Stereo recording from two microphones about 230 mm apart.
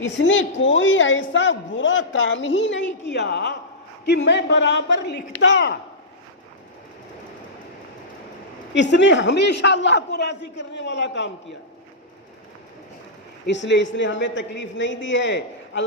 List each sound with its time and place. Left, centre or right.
0.0 s a man's voice: left
8.7 s a man's voice: left
13.5 s a man's voice: left